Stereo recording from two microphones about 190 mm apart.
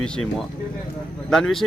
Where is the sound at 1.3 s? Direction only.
Centre (ahead or behind).